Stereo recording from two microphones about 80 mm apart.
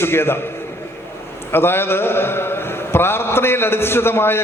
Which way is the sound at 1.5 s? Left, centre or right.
Left.